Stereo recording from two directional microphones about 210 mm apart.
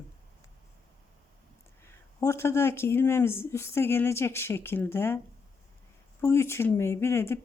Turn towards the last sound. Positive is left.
turn(degrees=10)  # may be behind; listen again after turning